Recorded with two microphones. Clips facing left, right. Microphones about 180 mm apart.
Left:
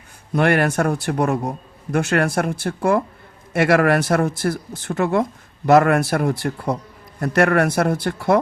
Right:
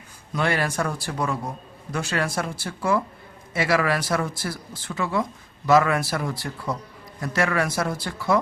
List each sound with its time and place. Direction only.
0.3 s a man's voice: 60° left (ahead or behind)